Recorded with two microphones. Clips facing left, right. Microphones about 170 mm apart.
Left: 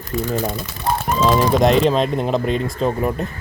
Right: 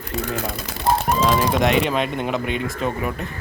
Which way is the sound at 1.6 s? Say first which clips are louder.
Left 4 dB; 35° left (ahead or behind).